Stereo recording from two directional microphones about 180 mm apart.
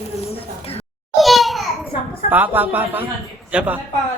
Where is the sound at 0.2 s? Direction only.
35° left (ahead or behind).